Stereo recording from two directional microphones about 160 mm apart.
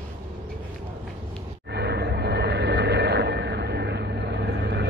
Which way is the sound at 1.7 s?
90° right.